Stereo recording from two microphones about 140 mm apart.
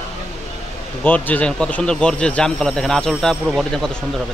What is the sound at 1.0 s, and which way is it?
Speech, 10° left (ahead or behind).